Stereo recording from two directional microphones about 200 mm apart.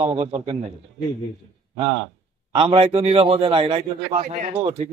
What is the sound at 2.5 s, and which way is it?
A man's voice, 30° right (ahead or behind).